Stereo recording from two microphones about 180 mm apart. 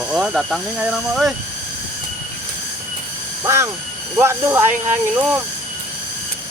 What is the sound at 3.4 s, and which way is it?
Speech, 15° right (ahead or behind).